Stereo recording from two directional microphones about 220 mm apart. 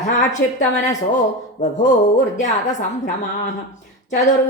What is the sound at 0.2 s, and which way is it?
Speech, 35° left (ahead or behind).